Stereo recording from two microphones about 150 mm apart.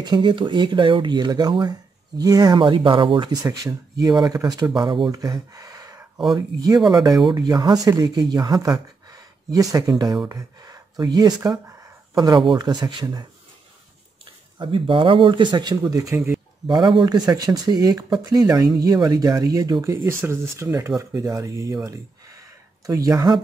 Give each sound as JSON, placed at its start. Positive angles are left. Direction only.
{"t": 0.0, "sound": "speech", "side_deg": -30}
{"t": 14.6, "sound": "speech", "side_deg": -35}
{"t": 21.8, "sound": "a sound", "side_deg": -20}
{"t": 22.8, "sound": "speech", "side_deg": -25}